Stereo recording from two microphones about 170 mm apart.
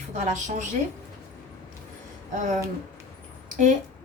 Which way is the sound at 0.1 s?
45° right (ahead or behind).